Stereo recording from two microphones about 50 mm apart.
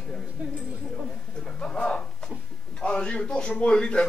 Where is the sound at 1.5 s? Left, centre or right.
Centre.